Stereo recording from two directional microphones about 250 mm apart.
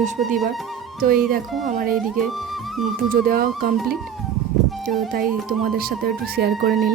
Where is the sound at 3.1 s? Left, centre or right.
Right.